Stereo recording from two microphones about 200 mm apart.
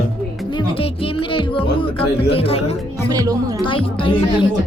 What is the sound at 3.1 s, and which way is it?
Speech, 20° right (ahead or behind).